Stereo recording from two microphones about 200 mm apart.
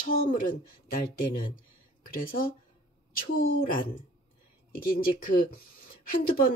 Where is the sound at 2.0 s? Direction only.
45° left (ahead or behind).